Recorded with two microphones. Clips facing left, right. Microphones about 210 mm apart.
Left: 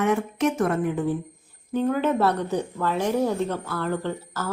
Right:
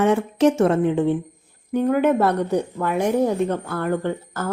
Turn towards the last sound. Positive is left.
turn(degrees=-55)  # may be behind; listen again after turning